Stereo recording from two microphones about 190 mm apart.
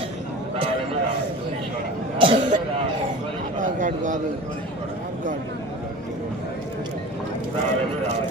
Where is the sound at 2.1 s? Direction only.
25° right (ahead or behind).